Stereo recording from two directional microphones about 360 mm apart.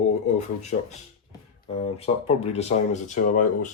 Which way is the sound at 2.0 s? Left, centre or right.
Centre.